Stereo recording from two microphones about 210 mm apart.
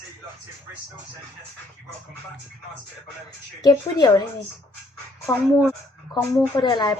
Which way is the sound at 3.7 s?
20° left (ahead or behind).